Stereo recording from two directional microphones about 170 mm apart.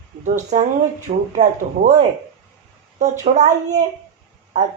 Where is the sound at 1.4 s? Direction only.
45° right (ahead or behind).